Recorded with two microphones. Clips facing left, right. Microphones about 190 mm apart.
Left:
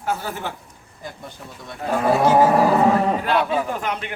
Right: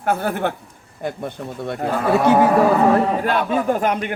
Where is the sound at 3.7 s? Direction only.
50° right (ahead or behind).